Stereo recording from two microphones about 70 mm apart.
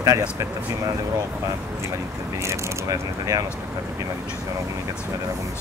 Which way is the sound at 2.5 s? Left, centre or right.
Right.